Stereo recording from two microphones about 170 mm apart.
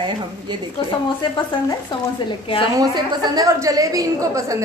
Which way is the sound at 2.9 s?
20° right (ahead or behind).